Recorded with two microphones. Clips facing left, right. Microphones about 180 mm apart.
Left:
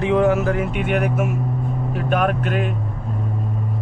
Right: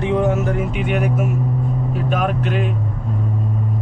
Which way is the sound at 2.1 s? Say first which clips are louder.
Left 2 dB; 55° left (ahead or behind).